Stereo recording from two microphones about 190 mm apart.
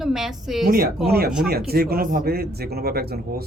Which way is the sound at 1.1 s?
55° right (ahead or behind).